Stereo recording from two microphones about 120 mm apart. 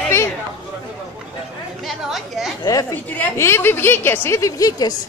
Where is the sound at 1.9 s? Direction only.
Centre (ahead or behind).